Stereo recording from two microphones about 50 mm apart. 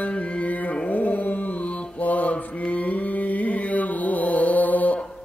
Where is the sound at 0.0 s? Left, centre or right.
Left.